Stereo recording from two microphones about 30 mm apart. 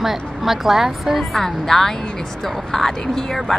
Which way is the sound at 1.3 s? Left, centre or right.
Centre.